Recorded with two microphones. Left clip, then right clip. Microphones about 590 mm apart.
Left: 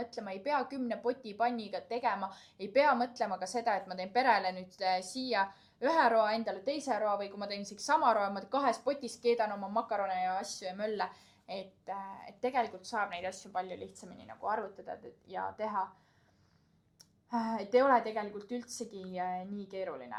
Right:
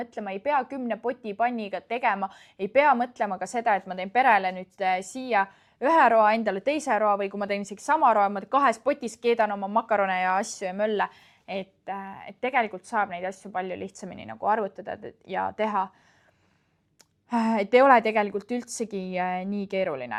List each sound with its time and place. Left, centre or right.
0.1 s speech: right
2.8 s speech: right
12.9 s speech: right
14.3 s speech: right
17.2 s a woman's voice: right